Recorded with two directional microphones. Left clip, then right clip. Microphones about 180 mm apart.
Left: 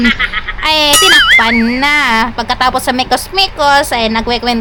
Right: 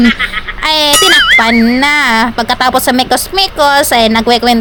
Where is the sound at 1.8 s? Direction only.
30° right (ahead or behind).